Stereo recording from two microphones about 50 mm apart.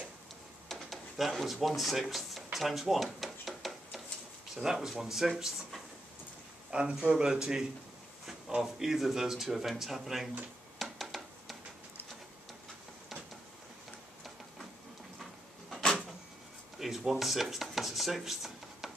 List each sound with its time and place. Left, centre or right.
0.7 s a sound: centre
4.6 s speech: centre
6.7 s speech: right
8.6 s speech: centre
10.8 s a sound: centre
15.8 s vehicle: centre
16.7 s speech: centre